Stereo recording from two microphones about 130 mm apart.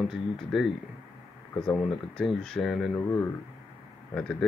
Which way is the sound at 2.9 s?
20° left (ahead or behind).